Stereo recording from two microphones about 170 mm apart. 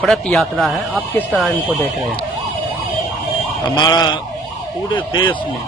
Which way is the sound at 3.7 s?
25° left (ahead or behind).